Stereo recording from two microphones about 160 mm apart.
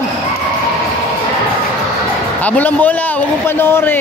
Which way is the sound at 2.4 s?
10° left (ahead or behind).